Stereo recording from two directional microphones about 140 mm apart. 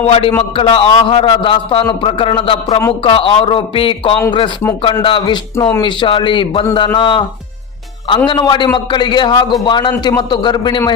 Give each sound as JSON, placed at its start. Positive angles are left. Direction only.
{"t": 0.0, "sound": "a man's voice", "side_deg": 40}
{"t": 8.3, "sound": "a man's voice", "side_deg": 35}